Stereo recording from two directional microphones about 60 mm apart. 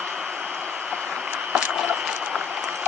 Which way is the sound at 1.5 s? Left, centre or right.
Centre.